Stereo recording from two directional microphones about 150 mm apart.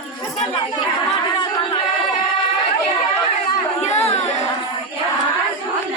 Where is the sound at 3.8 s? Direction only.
45° left (ahead or behind).